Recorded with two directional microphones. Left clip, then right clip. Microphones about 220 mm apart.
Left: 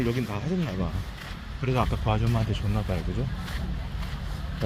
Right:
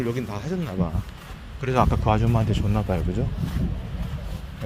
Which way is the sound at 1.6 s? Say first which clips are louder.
Right 6 dB; 40° right (ahead or behind).